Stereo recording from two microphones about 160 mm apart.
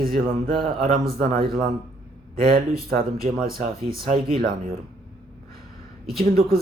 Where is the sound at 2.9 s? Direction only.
70° right (ahead or behind).